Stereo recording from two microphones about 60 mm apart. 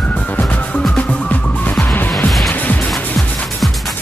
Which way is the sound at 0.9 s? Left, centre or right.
Left.